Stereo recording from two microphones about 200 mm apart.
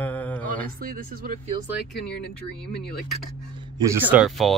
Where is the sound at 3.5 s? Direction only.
20° right (ahead or behind); by 4.5 s centre (ahead or behind).